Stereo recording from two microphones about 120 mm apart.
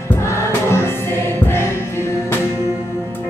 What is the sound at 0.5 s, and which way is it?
Music, 20° left (ahead or behind).